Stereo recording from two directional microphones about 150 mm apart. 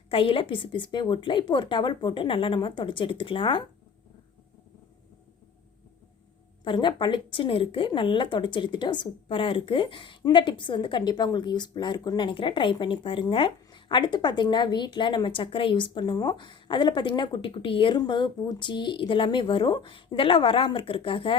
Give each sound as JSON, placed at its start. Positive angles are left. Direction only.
{"t": 0.1, "sound": "a woman's voice", "side_deg": 35}
{"t": 6.7, "sound": "a woman's voice", "side_deg": 30}